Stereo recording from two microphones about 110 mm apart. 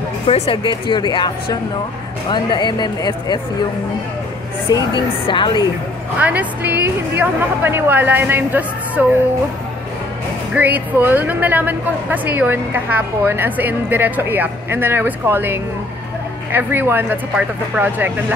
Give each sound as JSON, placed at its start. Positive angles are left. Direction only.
{"t": 0.3, "sound": "speech", "side_deg": 50}
{"t": 4.6, "sound": "speech", "side_deg": 40}
{"t": 6.1, "sound": "speech", "side_deg": -15}
{"t": 10.5, "sound": "speech", "side_deg": -15}